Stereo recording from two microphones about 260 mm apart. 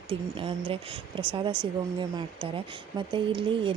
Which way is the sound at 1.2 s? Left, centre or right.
Centre.